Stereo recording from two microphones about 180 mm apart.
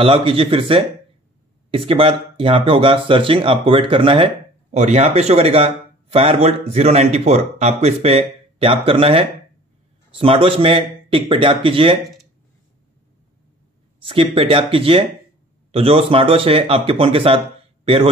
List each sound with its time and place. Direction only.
0.0 s speech: 30° right (ahead or behind)
14.0 s a man's voice: 30° right (ahead or behind)